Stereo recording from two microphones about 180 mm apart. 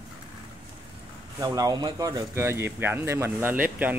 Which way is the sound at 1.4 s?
20° right (ahead or behind).